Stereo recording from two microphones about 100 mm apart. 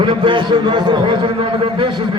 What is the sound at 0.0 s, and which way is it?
A man's voice, 55° right (ahead or behind).